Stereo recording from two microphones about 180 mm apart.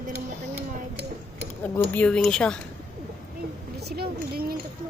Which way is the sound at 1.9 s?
5° left (ahead or behind).